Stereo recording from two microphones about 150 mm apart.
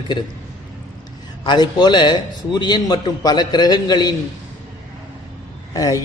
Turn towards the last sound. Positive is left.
turn(degrees=25)  # may be behind; listen again after turning